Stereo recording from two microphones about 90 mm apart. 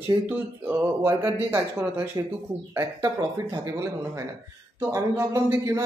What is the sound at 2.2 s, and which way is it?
Speech, 40° right (ahead or behind).